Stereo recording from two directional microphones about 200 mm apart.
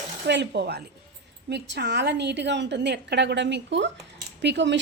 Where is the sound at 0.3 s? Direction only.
60° right (ahead or behind).